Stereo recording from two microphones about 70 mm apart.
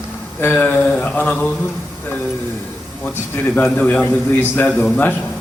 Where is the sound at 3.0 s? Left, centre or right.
Left.